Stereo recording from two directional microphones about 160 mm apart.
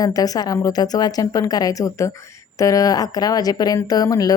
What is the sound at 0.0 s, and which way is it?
Speech, 25° left (ahead or behind).